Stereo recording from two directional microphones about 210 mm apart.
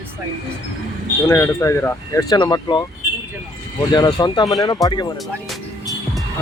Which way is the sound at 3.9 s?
20° left (ahead or behind).